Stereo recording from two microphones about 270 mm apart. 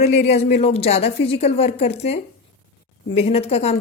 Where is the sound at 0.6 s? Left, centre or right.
Left.